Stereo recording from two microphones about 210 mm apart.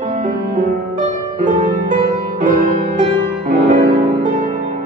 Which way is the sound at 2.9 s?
40° right (ahead or behind).